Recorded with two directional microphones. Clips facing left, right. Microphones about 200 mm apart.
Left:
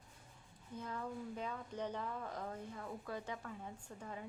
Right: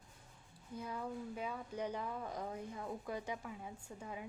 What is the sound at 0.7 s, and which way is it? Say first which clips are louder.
Speech: right 1 dB; 10° right (ahead or behind).